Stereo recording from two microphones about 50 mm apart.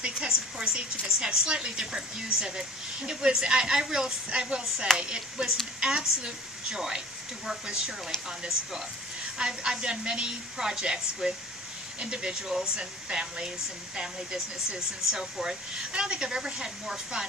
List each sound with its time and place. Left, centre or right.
0.0 s a woman's voice: centre